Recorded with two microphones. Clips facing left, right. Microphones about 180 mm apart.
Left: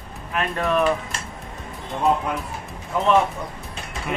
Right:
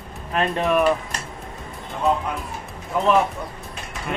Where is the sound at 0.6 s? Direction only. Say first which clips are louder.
Right 1 dB; 15° right (ahead or behind).